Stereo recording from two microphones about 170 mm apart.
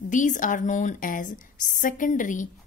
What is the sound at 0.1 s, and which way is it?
A woman's voice, 50° left (ahead or behind).